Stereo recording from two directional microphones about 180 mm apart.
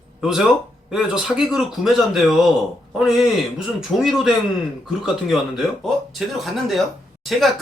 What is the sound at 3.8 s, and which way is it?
A man's voice, centre (ahead or behind).